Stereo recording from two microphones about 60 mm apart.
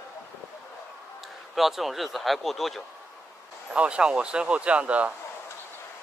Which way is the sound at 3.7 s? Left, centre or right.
Centre.